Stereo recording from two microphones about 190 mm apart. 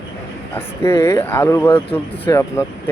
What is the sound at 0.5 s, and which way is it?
Speech, 15° left (ahead or behind).